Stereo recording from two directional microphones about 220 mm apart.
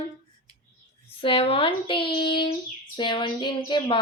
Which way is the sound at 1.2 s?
25° left (ahead or behind).